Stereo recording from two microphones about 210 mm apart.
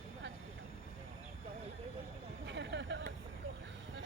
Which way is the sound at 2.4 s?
55° right (ahead or behind).